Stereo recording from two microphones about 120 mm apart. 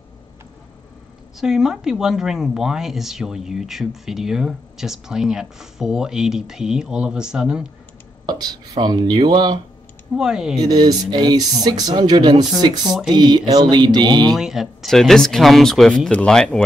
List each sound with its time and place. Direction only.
1.4 s speech: 5° right (ahead or behind)
8.3 s speech: 35° right (ahead or behind)
10.1 s speech: 5° right (ahead or behind)
10.6 s speech: 35° right (ahead or behind)
12.8 s speech: 5° right (ahead or behind)
13.1 s speech: 35° right (ahead or behind)
14.3 s speech: 5° right (ahead or behind)